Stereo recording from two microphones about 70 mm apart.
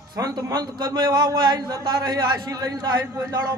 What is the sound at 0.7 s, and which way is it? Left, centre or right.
A man's voice, right.